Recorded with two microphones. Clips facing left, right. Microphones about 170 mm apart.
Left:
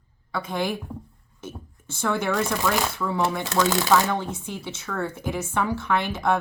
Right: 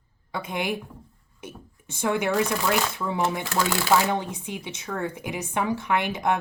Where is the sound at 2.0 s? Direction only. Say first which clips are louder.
Right 1 dB; 15° right (ahead or behind).